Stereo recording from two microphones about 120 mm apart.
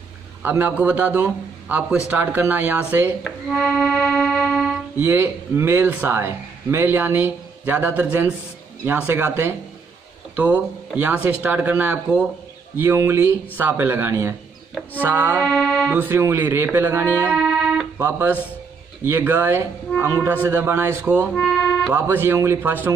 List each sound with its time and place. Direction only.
0.4 s a man's voice: 15° right (ahead or behind)
3.3 s music: centre (ahead or behind)
4.9 s a man's voice: 20° right (ahead or behind)
15.4 s music: 5° left (ahead or behind)
15.9 s a man's voice: 15° right (ahead or behind)
17.4 s music: 5° right (ahead or behind)
17.9 s a man's voice: 15° right (ahead or behind)
21.4 s music: 5° left (ahead or behind)
21.9 s a man's voice: 20° right (ahead or behind)